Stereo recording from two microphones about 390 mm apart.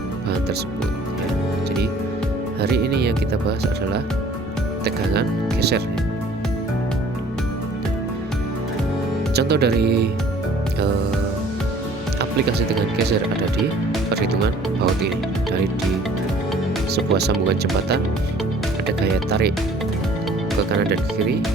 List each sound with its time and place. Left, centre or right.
2.6 s speech: right
4.8 s speech: right
9.3 s speech: right
14.1 s speech: right
16.9 s speech: right